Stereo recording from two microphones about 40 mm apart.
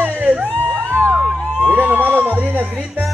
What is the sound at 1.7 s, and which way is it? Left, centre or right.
Speech, right.